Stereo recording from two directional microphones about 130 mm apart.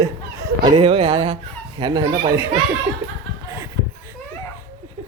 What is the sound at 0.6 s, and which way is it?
A woman's voice, 40° right (ahead or behind).